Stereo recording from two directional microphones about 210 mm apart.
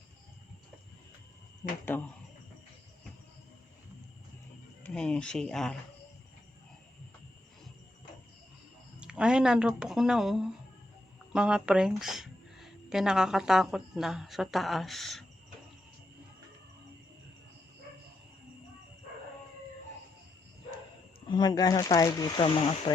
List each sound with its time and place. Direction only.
1.8 s speech: 10° left (ahead or behind)
4.8 s speech: 5° left (ahead or behind)
9.0 s speech: 5° right (ahead or behind)
21.2 s speech: 20° left (ahead or behind)